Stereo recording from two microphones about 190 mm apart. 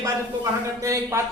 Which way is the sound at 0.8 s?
15° right (ahead or behind).